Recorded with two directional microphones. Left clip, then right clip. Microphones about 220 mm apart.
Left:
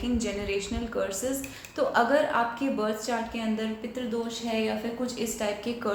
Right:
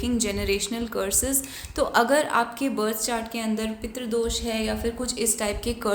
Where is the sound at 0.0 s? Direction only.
45° right (ahead or behind).